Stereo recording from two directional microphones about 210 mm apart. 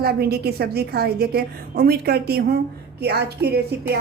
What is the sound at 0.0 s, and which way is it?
A woman's voice, 50° right (ahead or behind).